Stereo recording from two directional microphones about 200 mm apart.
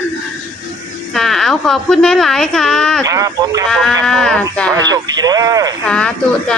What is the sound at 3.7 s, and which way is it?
A woman's voice, centre (ahead or behind).